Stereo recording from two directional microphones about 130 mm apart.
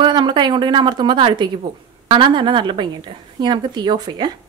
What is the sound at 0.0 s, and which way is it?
A woman's voice, 35° right (ahead or behind).